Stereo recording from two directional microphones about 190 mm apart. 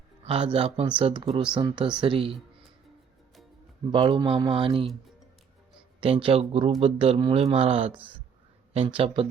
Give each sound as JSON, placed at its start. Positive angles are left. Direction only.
{"t": 0.3, "sound": "speech", "side_deg": -30}
{"t": 3.9, "sound": "speech", "side_deg": -25}
{"t": 6.0, "sound": "speech", "side_deg": -30}